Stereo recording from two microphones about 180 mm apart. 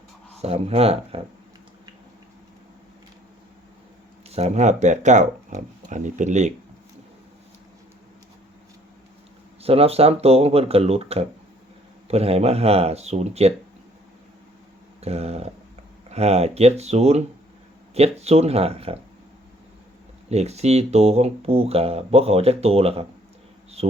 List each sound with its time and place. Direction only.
0.4 s speech: 35° right (ahead or behind)
4.3 s speech: 35° right (ahead or behind)
9.6 s speech: 35° right (ahead or behind)
15.0 s speech: 35° right (ahead or behind)
20.3 s speech: 35° right (ahead or behind)